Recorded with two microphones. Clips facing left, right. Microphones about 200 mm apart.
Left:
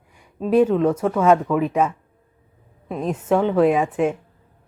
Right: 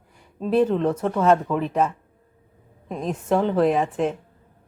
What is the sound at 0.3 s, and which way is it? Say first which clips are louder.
Speech: left 3 dB; 10° left (ahead or behind).